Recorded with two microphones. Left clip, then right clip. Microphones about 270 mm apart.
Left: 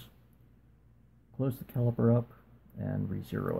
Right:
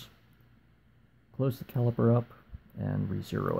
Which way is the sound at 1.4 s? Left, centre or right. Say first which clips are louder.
Right 2 dB; centre.